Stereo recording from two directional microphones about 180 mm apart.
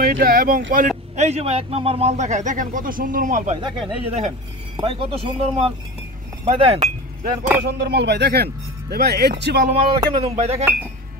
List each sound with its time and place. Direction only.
0.0 s a sound: 55° right (ahead or behind)
0.7 s speech: 45° right (ahead or behind)
3.6 s speech: 30° right (ahead or behind)
7.6 s speech: 65° right (ahead or behind)
9.7 s speech: 35° right (ahead or behind)